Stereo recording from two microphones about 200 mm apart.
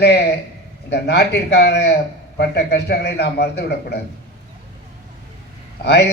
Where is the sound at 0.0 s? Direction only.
55° left (ahead or behind).